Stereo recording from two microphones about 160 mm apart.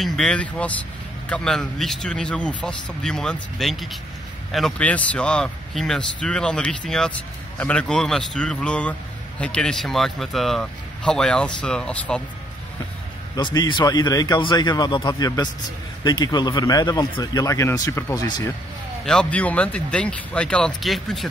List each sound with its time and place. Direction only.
0.0 s speech: 5° left (ahead or behind)
13.4 s speech: 30° left (ahead or behind)
19.0 s speech: 5° left (ahead or behind)